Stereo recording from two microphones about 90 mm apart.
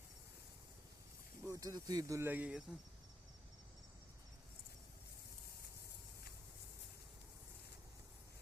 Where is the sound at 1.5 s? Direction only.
45° right (ahead or behind).